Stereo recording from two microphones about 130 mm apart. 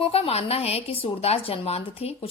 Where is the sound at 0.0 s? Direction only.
50° left (ahead or behind).